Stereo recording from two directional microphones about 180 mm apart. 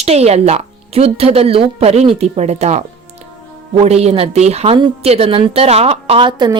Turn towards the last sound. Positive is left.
turn(degrees=-25)  # may be behind; listen again after turning